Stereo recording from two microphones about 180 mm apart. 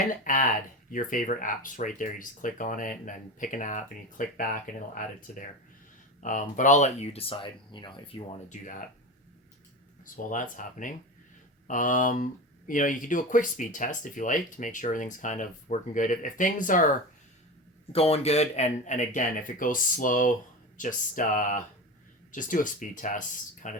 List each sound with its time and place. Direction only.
0.1 s speech: 45° left (ahead or behind)
10.2 s speech: 45° left (ahead or behind)
17.9 s speech: 35° left (ahead or behind)